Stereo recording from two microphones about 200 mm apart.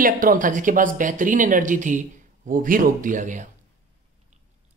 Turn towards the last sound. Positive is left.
turn(degrees=-40)  # may be behind; listen again after turning